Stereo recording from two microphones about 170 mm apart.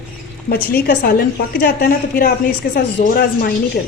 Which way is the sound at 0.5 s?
65° left (ahead or behind).